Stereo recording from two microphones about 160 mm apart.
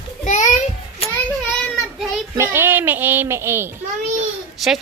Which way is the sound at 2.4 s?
15° right (ahead or behind).